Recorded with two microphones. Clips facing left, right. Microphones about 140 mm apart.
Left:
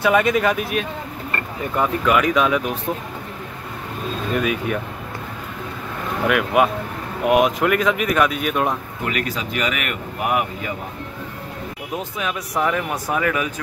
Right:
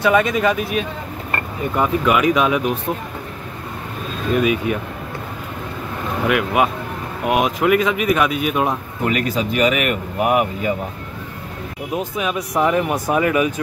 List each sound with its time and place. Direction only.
0.0 s speech: 5° left (ahead or behind)
1.8 s speech: 10° right (ahead or behind)
4.4 s speech: 5° right (ahead or behind)
6.2 s speech: 5° right (ahead or behind)
9.0 s speech: 25° right (ahead or behind)
12.2 s speech: 15° right (ahead or behind)